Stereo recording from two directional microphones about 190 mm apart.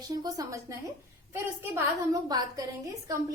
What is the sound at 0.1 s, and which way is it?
A woman's voice, 20° right (ahead or behind).